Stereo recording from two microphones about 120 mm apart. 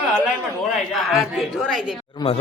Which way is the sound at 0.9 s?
Centre (ahead or behind).